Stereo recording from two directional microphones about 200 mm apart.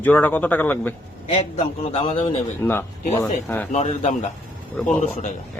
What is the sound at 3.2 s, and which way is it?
Speech, 10° left (ahead or behind).